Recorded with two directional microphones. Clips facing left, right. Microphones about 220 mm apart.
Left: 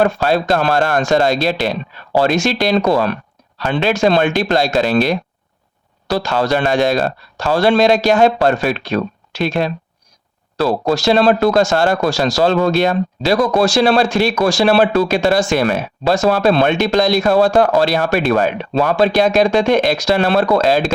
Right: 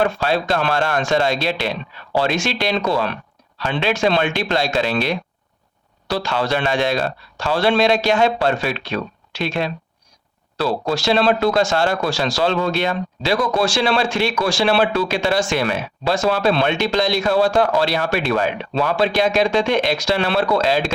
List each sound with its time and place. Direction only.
0.0 s speech: 45° left (ahead or behind)